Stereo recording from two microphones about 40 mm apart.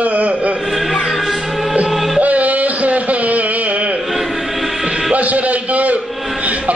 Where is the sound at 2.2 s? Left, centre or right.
Right.